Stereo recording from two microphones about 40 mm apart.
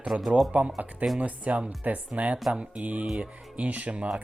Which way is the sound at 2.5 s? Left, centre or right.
Centre.